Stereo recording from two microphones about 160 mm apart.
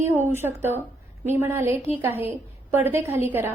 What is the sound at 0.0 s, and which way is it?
A woman's voice, 15° right (ahead or behind).